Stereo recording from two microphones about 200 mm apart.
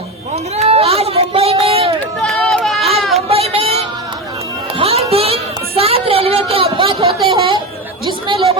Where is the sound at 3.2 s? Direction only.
30° right (ahead or behind).